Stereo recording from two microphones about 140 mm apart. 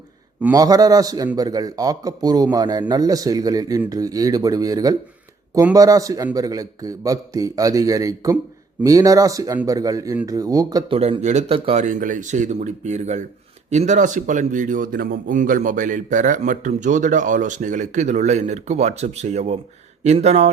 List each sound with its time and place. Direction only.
0.5 s a man's voice: 25° right (ahead or behind)
10.8 s speech: 40° right (ahead or behind)
11.5 s speech: 40° right (ahead or behind)
11.8 s speech: 70° right (ahead or behind); by 20.5 s 45° right (ahead or behind)